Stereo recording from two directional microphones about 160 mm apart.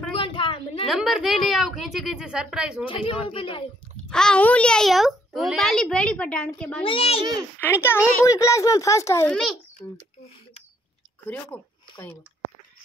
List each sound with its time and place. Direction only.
0.2 s a sound: 30° left (ahead or behind)
0.8 s a child's voice: 5° right (ahead or behind)
2.9 s a man's voice: 35° left (ahead or behind)
4.1 s a child's voice: 5° left (ahead or behind)
6.8 s a man's voice: 35° left (ahead or behind)
7.6 s speech: 15° left (ahead or behind)
9.3 s a child's voice: 5° left (ahead or behind)
11.5 s speech: 10° left (ahead or behind)